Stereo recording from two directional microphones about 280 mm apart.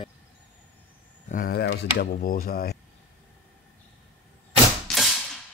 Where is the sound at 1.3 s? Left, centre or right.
Left.